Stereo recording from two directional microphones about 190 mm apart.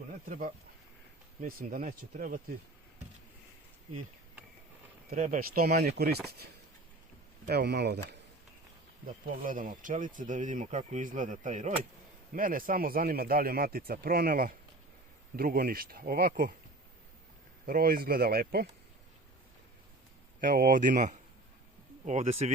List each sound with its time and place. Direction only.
0.3 s speech: 45° right (ahead or behind)
5.1 s speech: 40° right (ahead or behind); by 8.0 s 60° right (ahead or behind)
9.4 s speech: 45° right (ahead or behind)
17.7 s speech: 50° right (ahead or behind)
20.4 s speech: 45° right (ahead or behind)